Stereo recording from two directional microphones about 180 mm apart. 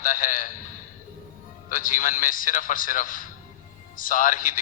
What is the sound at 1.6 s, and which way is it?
A man's voice, 50° left (ahead or behind).